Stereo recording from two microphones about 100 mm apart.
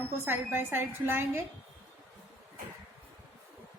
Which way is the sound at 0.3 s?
20° right (ahead or behind).